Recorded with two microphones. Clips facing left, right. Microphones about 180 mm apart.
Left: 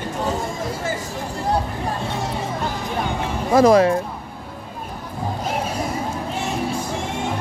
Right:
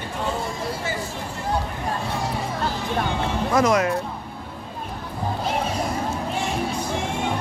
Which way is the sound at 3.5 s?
30° left (ahead or behind).